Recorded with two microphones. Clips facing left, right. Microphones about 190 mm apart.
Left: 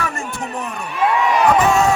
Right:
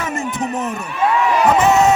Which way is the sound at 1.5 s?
20° right (ahead or behind).